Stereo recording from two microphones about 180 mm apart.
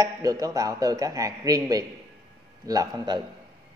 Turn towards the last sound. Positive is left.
turn(degrees=-25)  # may be behind; listen again after turning